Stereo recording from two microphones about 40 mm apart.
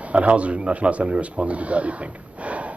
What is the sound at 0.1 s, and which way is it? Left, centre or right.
A woman's voice, right.